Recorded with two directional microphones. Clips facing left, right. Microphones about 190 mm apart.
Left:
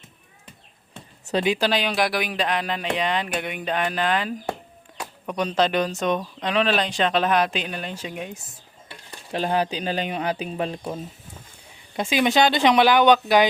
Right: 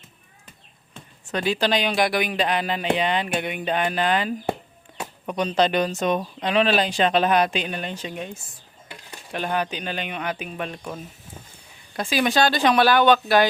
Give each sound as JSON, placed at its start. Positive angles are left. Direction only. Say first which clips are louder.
{"t": 1.3, "sound": "speech", "louder": "left 3 dB", "side_deg": 25}
{"t": 1.5, "sound": "speech", "louder": "right 1 dB", "side_deg": 5}
{"t": 9.3, "sound": "speech", "louder": "left 3 dB", "side_deg": 30}